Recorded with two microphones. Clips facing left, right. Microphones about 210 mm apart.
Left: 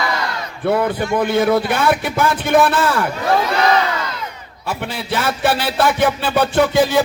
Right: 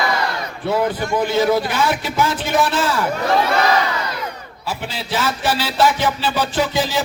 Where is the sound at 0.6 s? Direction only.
55° left (ahead or behind).